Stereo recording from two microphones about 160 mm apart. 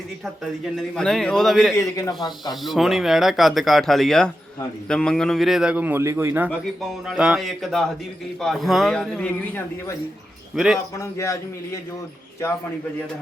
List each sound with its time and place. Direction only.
0.8 s speech: 5° left (ahead or behind)
1.7 s a man's voice: 20° left (ahead or behind)
2.4 s speech: centre (ahead or behind)
10.5 s speech: 5° right (ahead or behind)
11.2 s a man's voice: 20° left (ahead or behind)